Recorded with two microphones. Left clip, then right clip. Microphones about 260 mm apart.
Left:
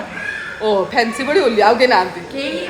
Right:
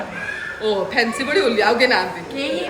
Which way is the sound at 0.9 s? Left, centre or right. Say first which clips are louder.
Left 3 dB; centre.